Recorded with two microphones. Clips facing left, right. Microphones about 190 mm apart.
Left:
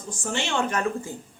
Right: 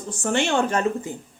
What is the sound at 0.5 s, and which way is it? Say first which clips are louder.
Speech: even; 30° right (ahead or behind).